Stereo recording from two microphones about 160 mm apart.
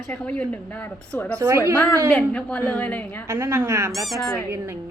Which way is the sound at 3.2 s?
20° right (ahead or behind).